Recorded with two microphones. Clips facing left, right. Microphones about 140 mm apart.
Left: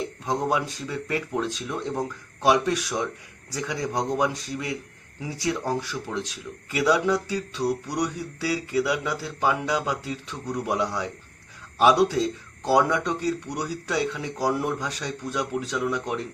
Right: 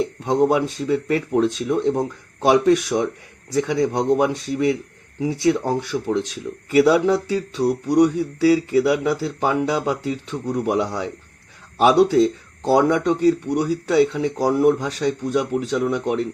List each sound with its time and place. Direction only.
0.3 s speech: 25° right (ahead or behind)
12.6 s speech: 25° right (ahead or behind)